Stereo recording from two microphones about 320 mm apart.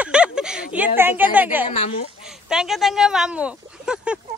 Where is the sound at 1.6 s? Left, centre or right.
Centre.